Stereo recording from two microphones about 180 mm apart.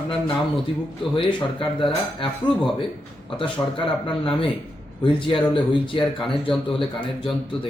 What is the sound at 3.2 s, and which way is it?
A man's voice, 30° left (ahead or behind).